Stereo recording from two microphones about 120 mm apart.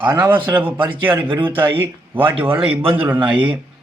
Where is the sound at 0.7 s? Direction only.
45° right (ahead or behind).